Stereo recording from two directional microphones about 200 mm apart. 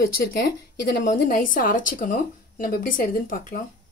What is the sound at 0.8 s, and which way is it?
Speech, 45° left (ahead or behind).